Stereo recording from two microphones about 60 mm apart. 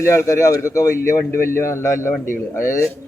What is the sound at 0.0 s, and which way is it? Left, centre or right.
A man's voice, left.